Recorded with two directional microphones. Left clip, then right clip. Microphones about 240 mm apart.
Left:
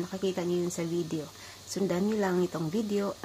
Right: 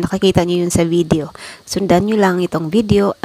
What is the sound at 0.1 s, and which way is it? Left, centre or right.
Speech, right.